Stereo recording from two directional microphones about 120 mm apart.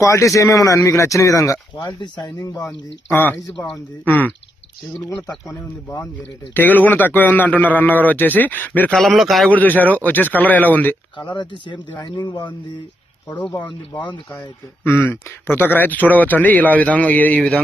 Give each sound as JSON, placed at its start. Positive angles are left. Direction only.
{"t": 0.0, "sound": "speech", "side_deg": 25}
{"t": 1.9, "sound": "speech", "side_deg": 40}
{"t": 5.0, "sound": "speech", "side_deg": 30}
{"t": 6.5, "sound": "speech", "side_deg": 15}
{"t": 8.9, "sound": "speech", "side_deg": 0}
{"t": 9.5, "sound": "speech", "side_deg": 15}
{"t": 11.2, "sound": "speech", "side_deg": 40}
{"t": 13.5, "sound": "speech", "side_deg": 40}
{"t": 15.0, "sound": "speech", "side_deg": 15}